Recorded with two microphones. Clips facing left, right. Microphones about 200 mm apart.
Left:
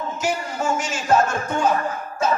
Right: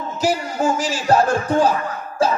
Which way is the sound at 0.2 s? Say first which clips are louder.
Right 6 dB; 35° right (ahead or behind).